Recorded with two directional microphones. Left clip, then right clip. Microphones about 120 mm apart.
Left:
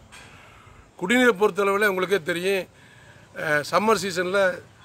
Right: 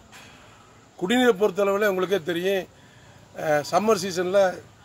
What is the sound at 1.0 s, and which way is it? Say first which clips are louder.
Speech: left 1 dB; 20° left (ahead or behind).